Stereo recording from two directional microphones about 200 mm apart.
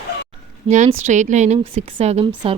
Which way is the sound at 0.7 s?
35° right (ahead or behind).